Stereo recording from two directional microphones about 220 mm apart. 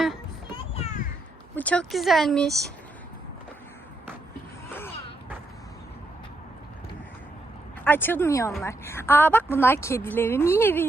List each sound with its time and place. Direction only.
0.5 s a sound: 25° left (ahead or behind)
1.5 s speech: 5° left (ahead or behind)
7.9 s a woman's voice: 10° left (ahead or behind)